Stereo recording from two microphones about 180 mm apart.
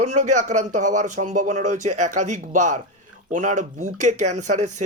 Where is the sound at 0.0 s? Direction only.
40° right (ahead or behind).